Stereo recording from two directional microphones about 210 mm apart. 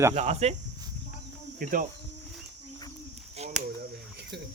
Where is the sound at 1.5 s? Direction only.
40° right (ahead or behind).